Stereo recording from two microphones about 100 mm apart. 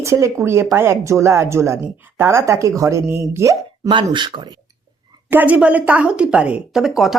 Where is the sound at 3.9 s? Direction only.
55° right (ahead or behind).